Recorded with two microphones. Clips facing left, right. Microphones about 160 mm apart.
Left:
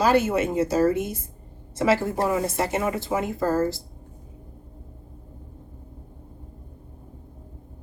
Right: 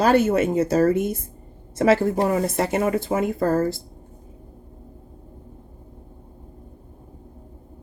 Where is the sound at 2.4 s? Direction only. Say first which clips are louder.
Right 3 dB; 55° right (ahead or behind).